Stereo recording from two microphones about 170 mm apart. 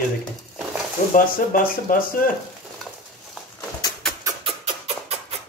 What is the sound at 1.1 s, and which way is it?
Speech, 55° left (ahead or behind).